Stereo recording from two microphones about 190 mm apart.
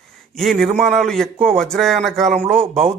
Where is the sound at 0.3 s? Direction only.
Centre (ahead or behind).